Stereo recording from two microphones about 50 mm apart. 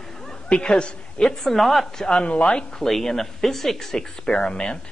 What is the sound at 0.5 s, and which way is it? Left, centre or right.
Speech, centre.